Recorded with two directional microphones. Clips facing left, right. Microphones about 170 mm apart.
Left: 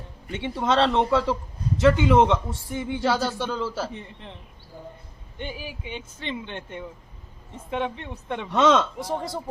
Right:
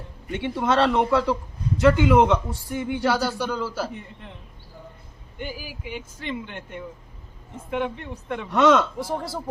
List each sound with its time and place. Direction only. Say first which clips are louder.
0.3 s a man's voice: right 1 dB; 20° left (ahead or behind)
5.4 s a man's voice: even; 25° left (ahead or behind)